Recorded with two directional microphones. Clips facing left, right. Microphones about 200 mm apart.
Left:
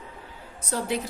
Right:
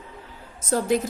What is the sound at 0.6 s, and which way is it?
Speech, 45° right (ahead or behind).